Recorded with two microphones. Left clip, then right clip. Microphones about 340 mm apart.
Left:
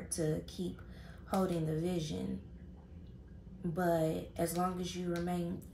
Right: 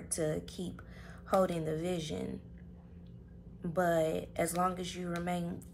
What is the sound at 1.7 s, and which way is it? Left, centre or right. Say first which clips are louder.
Speech: right 2 dB; right.